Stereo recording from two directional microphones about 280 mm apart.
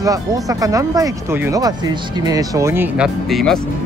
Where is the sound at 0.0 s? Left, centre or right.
Centre.